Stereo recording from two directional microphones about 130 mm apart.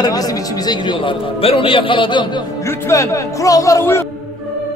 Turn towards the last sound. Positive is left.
turn(degrees=20)  # may be behind; listen again after turning